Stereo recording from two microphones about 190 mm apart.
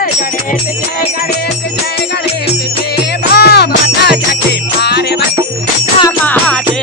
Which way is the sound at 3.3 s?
60° left (ahead or behind).